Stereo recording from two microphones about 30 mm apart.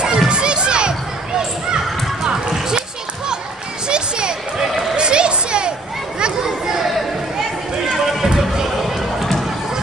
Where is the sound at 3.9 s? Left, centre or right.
Right.